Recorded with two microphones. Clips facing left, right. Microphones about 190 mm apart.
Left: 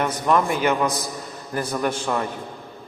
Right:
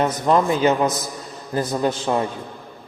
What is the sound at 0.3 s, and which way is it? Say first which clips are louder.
A man's voice: right 3 dB; 25° right (ahead or behind).